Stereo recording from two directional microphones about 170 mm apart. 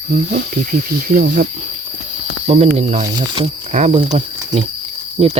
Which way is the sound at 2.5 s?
40° right (ahead or behind).